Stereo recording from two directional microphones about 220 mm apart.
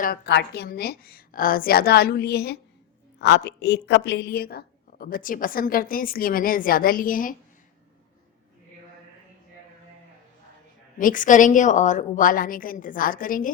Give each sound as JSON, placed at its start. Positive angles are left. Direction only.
{"t": 0.0, "sound": "a woman's voice", "side_deg": 45}
{"t": 10.9, "sound": "a woman's voice", "side_deg": 35}